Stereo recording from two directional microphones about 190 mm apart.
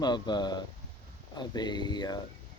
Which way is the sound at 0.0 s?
20° left (ahead or behind).